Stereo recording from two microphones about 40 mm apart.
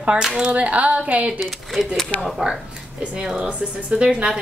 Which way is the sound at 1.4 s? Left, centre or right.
Centre.